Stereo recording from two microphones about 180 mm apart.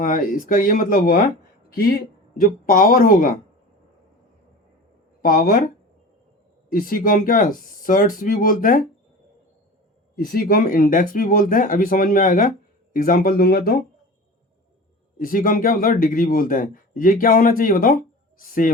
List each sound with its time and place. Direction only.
0.0 s speech: 50° left (ahead or behind)
2.4 s speech: 50° left (ahead or behind)
5.2 s speech: 55° left (ahead or behind)
6.7 s speech: 50° left (ahead or behind)
10.2 s speech: 55° left (ahead or behind)
15.2 s speech: 50° left (ahead or behind)